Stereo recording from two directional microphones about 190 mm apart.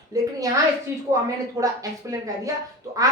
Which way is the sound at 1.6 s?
20° right (ahead or behind).